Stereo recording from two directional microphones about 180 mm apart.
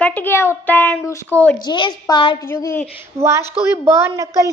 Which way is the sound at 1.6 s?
25° left (ahead or behind).